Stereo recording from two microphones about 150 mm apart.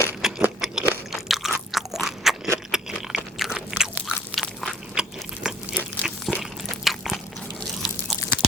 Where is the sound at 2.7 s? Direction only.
5° right (ahead or behind).